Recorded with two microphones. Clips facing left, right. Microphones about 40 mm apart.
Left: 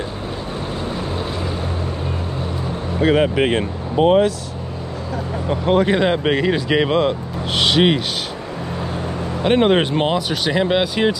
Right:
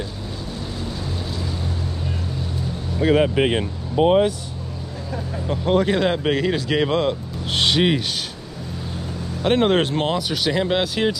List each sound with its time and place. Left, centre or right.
3.0 s speech: left
5.5 s speech: left
8.9 s vehicle: left
9.4 s speech: left